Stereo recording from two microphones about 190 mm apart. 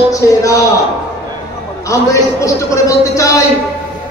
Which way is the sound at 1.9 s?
15° left (ahead or behind).